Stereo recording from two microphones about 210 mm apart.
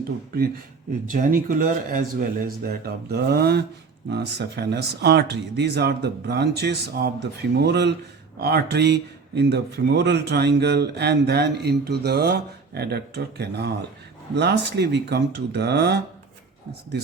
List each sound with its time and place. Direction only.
1.1 s speech: 40° right (ahead or behind)